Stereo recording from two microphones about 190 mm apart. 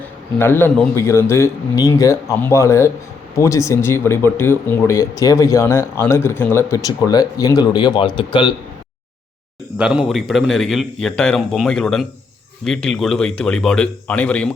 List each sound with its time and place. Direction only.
0.3 s speech: 10° left (ahead or behind)
9.7 s a man's voice: 5° right (ahead or behind)